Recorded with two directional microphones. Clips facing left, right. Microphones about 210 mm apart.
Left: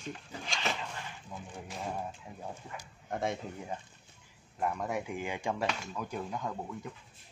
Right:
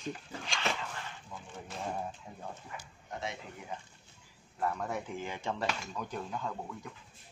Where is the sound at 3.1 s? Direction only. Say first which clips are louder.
Left 6 dB; 50° left (ahead or behind).